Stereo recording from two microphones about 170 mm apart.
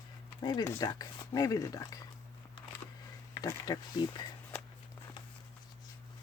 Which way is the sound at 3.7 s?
20° left (ahead or behind).